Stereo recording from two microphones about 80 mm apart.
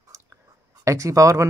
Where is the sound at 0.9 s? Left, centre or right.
Right.